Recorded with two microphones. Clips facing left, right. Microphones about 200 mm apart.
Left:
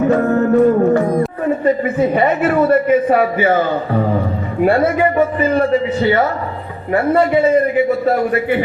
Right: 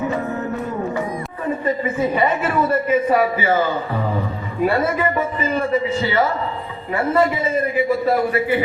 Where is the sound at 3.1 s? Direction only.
45° left (ahead or behind).